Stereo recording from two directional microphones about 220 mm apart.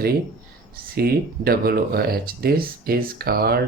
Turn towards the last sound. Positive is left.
turn(degrees=-45)  # may be behind; listen again after turning